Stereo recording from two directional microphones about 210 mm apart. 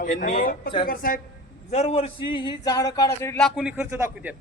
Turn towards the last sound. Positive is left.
turn(degrees=-10)  # may be behind; listen again after turning